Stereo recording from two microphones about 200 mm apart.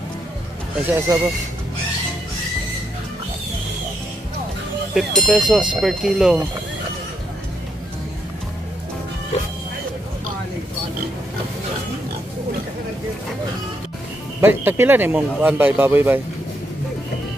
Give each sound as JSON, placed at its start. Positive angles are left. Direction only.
{"t": 0.9, "sound": "speech", "side_deg": -15}
{"t": 4.9, "sound": "speech", "side_deg": 0}
{"t": 9.3, "sound": "music", "side_deg": 30}
{"t": 14.4, "sound": "speech", "side_deg": -10}